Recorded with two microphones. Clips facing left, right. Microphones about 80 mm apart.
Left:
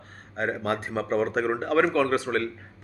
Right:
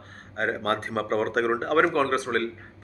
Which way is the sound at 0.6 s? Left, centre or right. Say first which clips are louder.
Right 1 dB; right.